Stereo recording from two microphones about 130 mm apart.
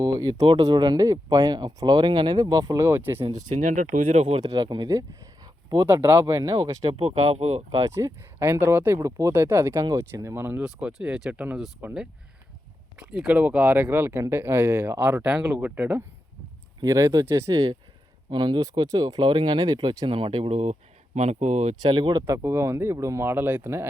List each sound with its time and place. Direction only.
0.0 s speech: 25° right (ahead or behind)
3.3 s speech: 80° right
4.1 s speech: 55° right (ahead or behind)
4.4 s speech: 30° right (ahead or behind)
5.8 s speech: 15° right (ahead or behind)
6.9 s speech: 50° right (ahead or behind)
7.9 s speech: 20° right (ahead or behind)
16.8 s speech: 25° right (ahead or behind)
20.1 s speech: 40° right (ahead or behind); by 21.8 s 60° right (ahead or behind)
21.8 s speech: 35° right (ahead or behind)
22.3 s speech: 20° right (ahead or behind)